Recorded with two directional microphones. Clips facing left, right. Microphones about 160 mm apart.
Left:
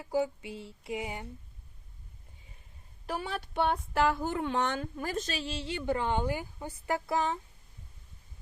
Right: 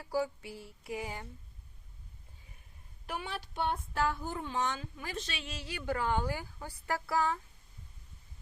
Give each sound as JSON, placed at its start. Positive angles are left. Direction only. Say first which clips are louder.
{"t": 0.0, "sound": "speech", "louder": "left 3 dB", "side_deg": 20}
{"t": 3.1, "sound": "speech", "louder": "left 4 dB", "side_deg": 40}